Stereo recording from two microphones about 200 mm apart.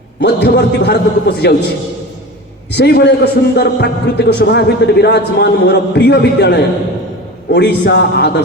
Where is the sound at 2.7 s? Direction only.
55° left (ahead or behind).